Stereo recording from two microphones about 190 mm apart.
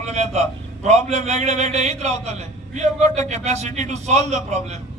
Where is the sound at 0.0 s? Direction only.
35° right (ahead or behind).